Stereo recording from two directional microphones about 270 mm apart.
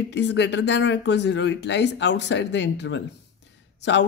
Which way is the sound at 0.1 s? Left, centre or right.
Left.